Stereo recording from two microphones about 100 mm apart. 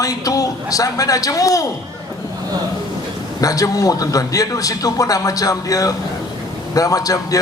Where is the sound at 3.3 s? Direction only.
35° left (ahead or behind).